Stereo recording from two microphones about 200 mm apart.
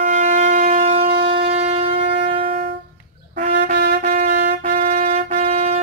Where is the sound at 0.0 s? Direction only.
40° right (ahead or behind).